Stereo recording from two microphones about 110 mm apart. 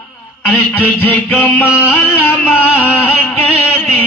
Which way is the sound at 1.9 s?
20° left (ahead or behind).